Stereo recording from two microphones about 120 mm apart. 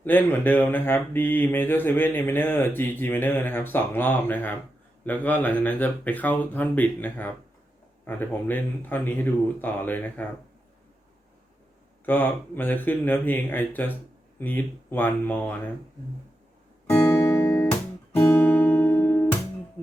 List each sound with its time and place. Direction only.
0.0 s speech: 15° left (ahead or behind)
12.0 s speech: 15° left (ahead or behind)
16.9 s guitar: 15° left (ahead or behind)